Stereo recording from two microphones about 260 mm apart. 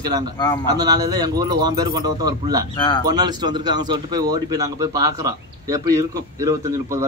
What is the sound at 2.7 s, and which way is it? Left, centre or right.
Speech, centre.